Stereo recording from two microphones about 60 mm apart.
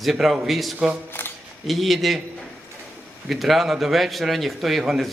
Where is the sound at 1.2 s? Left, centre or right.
Left.